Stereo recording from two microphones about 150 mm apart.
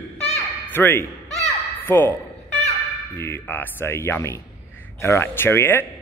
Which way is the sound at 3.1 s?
15° left (ahead or behind).